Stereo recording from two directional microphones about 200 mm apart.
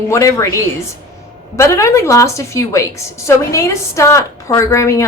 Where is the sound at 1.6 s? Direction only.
15° left (ahead or behind).